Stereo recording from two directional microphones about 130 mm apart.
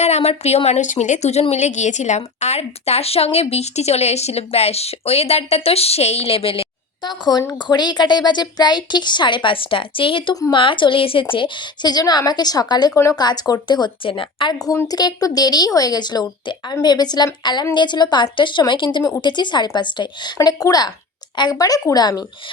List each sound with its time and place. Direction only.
0.0 s a woman's voice: 55° left (ahead or behind)
7.1 s a woman's voice: 35° left (ahead or behind)
14.6 s a woman's voice: 25° left (ahead or behind)